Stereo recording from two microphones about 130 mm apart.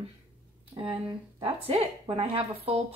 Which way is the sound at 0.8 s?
35° right (ahead or behind).